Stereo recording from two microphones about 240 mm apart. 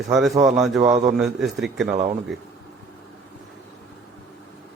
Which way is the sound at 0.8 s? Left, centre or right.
Right.